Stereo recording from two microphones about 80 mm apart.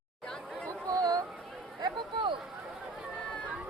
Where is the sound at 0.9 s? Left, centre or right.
Right.